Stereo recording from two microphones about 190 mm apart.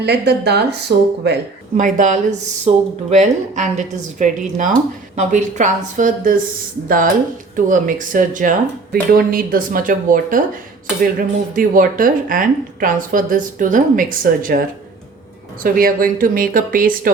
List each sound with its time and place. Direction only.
0.0 s speech: 60° right (ahead or behind)
1.7 s a woman's voice: 40° right (ahead or behind)
11.5 s a woman's voice: 45° right (ahead or behind)
15.6 s a woman's voice: 45° right (ahead or behind)